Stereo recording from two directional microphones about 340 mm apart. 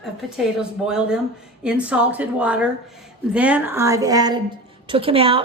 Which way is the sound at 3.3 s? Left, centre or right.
Centre.